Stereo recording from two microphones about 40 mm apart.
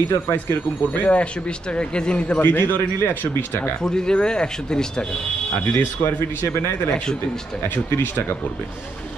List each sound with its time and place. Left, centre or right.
0.1 s speech: left
1.0 s a man's voice: left
2.4 s a man's voice: left
2.8 s speech: left
3.8 s speech: centre
5.7 s speech: left
7.6 s speech: left